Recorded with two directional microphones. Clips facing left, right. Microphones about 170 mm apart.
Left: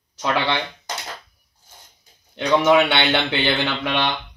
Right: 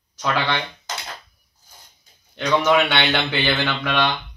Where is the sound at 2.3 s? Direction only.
20° left (ahead or behind).